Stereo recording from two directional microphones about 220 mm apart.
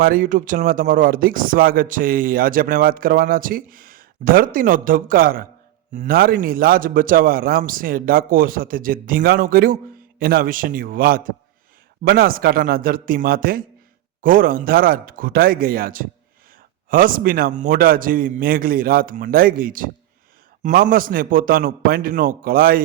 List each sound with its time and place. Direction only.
0.0 s speech: 40° right (ahead or behind)